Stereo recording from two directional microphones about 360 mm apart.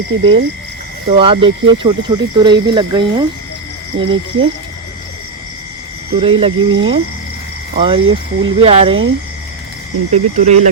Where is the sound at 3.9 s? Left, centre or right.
Right.